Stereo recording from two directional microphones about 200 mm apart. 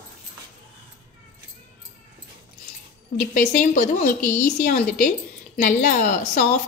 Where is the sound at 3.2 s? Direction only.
40° left (ahead or behind).